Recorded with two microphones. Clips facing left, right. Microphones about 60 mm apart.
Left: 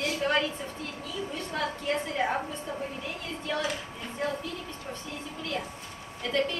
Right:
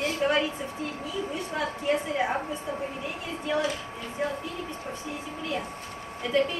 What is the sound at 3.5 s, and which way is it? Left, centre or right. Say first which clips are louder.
Speech: right 4 dB; centre.